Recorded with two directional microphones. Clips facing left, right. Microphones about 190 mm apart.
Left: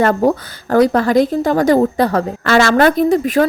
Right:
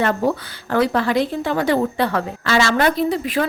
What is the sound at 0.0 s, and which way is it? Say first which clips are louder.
A woman's voice: left 6 dB; 45° left (ahead or behind).